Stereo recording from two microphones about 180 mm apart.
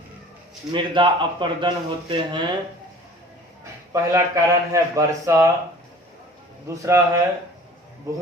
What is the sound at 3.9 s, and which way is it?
Speech, 20° right (ahead or behind).